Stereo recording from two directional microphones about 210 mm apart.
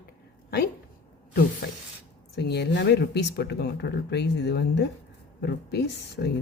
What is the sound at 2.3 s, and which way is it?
Speech, 50° left (ahead or behind).